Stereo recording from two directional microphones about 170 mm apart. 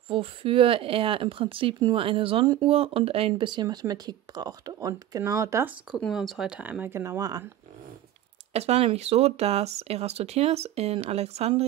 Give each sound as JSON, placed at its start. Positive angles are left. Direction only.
{"t": 0.1, "sound": "speech", "side_deg": -30}
{"t": 5.9, "sound": "speech", "side_deg": 0}
{"t": 8.5, "sound": "speech", "side_deg": -35}